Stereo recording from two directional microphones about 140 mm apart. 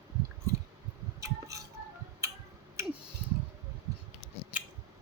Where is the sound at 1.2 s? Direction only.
25° right (ahead or behind).